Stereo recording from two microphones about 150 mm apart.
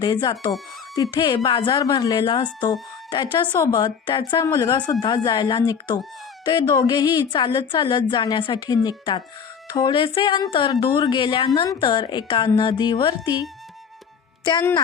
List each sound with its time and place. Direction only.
0.0 s a woman's voice: 30° left (ahead or behind)